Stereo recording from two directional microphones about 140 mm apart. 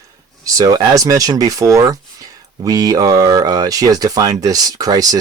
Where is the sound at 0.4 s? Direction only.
25° right (ahead or behind).